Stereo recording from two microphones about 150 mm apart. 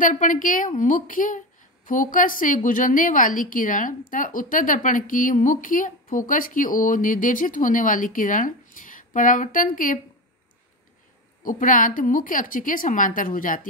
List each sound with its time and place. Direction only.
0.0 s a woman's voice: 60° left (ahead or behind)
11.4 s a woman's voice: 65° left (ahead or behind)